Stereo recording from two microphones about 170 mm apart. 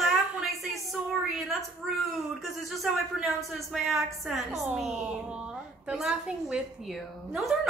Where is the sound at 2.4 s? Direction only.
Centre (ahead or behind).